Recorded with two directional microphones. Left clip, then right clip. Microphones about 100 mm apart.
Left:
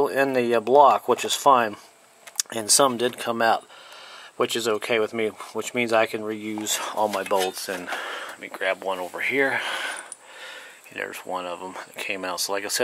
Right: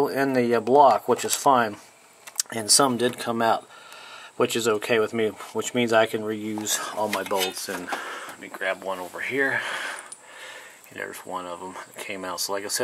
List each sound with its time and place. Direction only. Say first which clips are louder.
0.1 s speech: left 1 dB; 15° left (ahead or behind)
9.2 s a sound: left 2 dB; 25° left (ahead or behind)
11.0 s speech: left 3 dB; 20° left (ahead or behind)